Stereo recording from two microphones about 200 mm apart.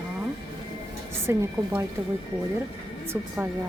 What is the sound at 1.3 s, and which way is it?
Speech, 10° right (ahead or behind).